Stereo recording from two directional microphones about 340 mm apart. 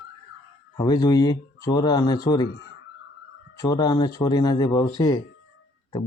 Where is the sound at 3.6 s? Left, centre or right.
Centre.